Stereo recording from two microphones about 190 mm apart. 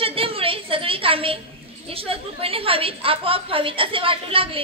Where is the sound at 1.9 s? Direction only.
30° right (ahead or behind).